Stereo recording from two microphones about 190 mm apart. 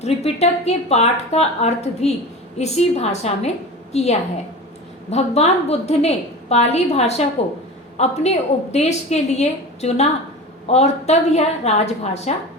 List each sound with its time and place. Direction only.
0.0 s a woman's voice: 35° left (ahead or behind)